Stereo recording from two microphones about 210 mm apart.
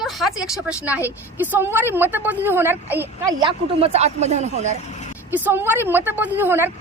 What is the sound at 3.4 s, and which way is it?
Speech, 30° right (ahead or behind).